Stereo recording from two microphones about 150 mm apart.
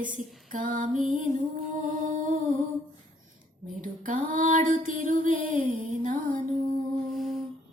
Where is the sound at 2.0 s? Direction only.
55° right (ahead or behind).